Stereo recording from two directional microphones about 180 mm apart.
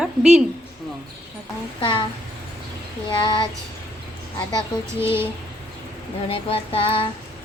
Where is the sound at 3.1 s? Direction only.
25° left (ahead or behind).